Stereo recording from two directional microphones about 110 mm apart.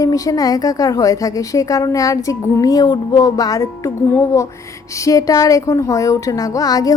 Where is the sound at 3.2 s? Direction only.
35° left (ahead or behind).